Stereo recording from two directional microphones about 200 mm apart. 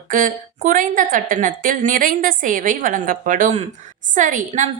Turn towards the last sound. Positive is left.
turn(degrees=-40)  # may be behind; listen again after turning